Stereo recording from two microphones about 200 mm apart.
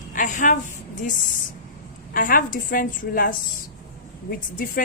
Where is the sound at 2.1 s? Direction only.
45° left (ahead or behind).